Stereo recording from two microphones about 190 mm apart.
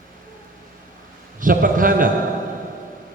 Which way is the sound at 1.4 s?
45° right (ahead or behind).